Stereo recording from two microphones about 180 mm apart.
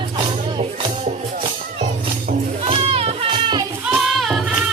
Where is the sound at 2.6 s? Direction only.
30° right (ahead or behind).